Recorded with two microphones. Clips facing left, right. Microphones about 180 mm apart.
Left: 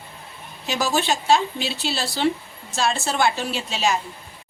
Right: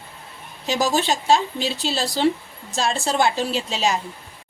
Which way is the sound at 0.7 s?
35° right (ahead or behind).